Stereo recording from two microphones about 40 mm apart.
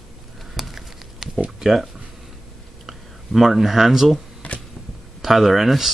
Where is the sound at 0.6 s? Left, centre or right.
Centre.